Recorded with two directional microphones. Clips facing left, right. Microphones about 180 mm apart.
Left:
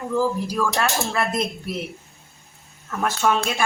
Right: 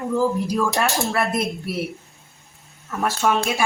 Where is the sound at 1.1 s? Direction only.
5° right (ahead or behind).